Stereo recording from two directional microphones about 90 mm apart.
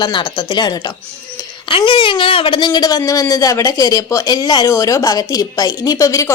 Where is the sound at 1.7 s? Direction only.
75° left (ahead or behind); by 6.3 s 35° left (ahead or behind).